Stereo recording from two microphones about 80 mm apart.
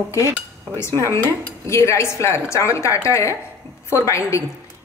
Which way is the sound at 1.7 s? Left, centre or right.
Left.